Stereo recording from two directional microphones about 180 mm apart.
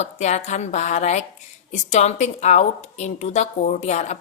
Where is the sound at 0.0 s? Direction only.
40° left (ahead or behind).